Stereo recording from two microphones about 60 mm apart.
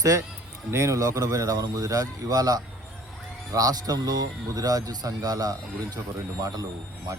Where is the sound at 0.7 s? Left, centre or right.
Right.